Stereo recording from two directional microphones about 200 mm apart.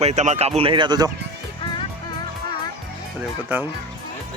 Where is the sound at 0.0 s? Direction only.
35° right (ahead or behind).